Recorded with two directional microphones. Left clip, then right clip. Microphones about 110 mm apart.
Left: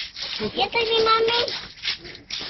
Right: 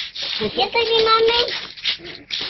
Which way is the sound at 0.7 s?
30° left (ahead or behind).